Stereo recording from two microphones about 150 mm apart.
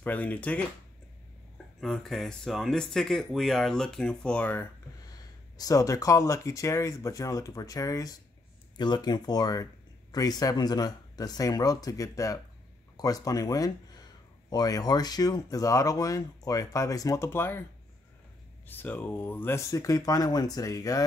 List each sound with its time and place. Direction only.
0.0 s speech: 10° left (ahead or behind)
1.8 s speech: centre (ahead or behind)
5.6 s speech: 25° left (ahead or behind)
18.7 s speech: 15° left (ahead or behind)